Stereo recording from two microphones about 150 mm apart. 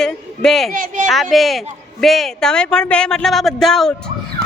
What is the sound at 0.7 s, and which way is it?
Speech, 65° right (ahead or behind).